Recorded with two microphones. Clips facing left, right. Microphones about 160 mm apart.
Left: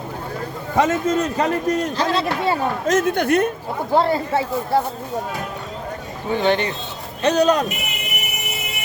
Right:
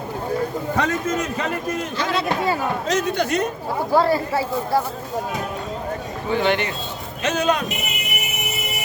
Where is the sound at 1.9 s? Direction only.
30° left (ahead or behind).